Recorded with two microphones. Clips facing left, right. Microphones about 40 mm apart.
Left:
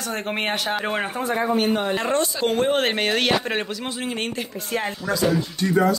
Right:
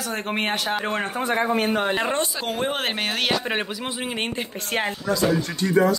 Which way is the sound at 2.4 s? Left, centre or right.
Centre.